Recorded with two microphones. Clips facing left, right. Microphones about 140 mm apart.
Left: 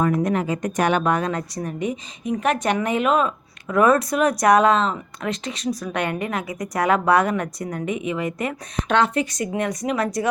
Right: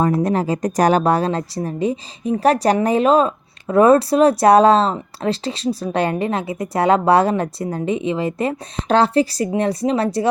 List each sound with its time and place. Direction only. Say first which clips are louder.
0.0 s speech: right 3 dB; 35° right (ahead or behind)